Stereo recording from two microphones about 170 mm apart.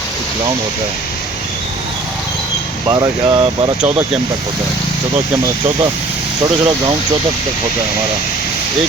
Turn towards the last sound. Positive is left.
turn(degrees=-20)  # may be behind; listen again after turning